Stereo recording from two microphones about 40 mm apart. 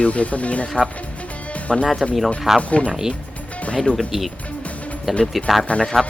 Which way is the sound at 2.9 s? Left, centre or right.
Centre.